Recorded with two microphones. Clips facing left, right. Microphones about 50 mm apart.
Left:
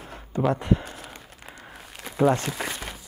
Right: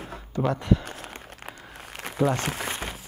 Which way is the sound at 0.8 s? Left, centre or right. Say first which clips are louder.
Right 1 dB; right.